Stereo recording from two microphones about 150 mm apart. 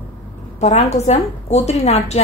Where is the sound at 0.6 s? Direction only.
45° left (ahead or behind).